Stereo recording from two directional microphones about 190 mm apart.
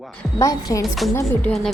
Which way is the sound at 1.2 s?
Centre (ahead or behind).